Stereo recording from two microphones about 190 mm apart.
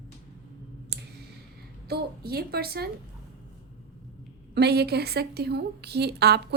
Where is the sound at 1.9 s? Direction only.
55° right (ahead or behind).